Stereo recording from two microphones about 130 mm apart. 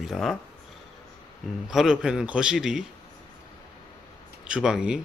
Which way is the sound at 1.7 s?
5° right (ahead or behind).